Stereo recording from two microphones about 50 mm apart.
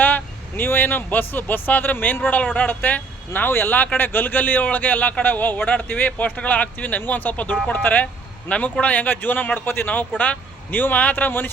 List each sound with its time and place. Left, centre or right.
0.0 s speech: left
8.4 s a man's voice: left